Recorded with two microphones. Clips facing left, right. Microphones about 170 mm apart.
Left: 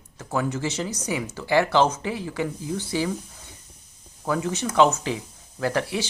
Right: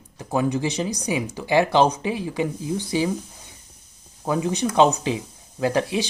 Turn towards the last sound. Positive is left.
turn(degrees=-20)  # may be behind; listen again after turning